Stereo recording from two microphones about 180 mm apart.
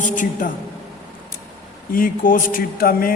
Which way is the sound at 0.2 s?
50° left (ahead or behind).